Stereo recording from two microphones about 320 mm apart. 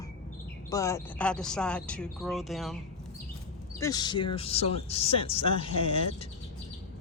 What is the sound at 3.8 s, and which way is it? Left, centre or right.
Speech, centre.